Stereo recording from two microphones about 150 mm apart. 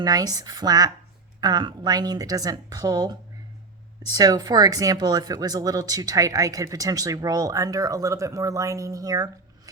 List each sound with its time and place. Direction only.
0.0 s speech: 25° right (ahead or behind)